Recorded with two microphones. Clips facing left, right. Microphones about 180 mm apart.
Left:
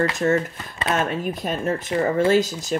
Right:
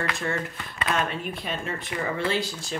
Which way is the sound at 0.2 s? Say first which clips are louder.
Left 9 dB; 35° left (ahead or behind).